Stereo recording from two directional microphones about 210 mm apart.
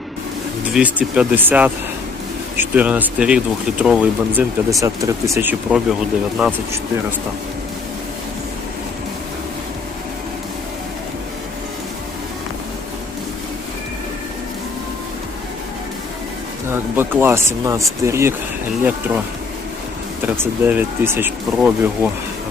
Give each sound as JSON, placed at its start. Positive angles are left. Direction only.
{"t": 0.6, "sound": "speech", "side_deg": -5}
{"t": 17.0, "sound": "speech", "side_deg": -10}
{"t": 20.2, "sound": "speech", "side_deg": -10}